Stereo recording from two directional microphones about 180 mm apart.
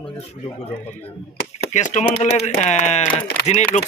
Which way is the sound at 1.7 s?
40° left (ahead or behind).